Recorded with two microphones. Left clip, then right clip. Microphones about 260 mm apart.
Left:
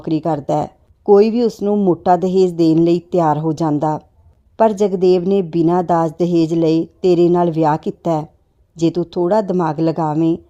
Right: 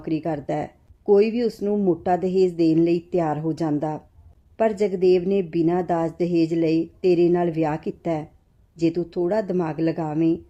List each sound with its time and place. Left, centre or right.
0.1 s speech: left